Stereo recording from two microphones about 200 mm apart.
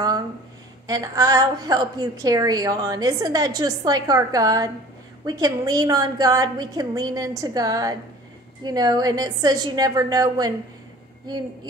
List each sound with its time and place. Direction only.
0.8 s a woman's voice: 20° right (ahead or behind)